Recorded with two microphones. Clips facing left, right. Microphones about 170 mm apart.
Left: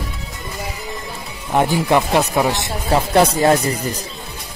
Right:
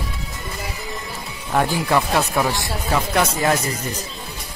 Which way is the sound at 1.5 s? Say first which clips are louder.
Left 3 dB; 20° left (ahead or behind).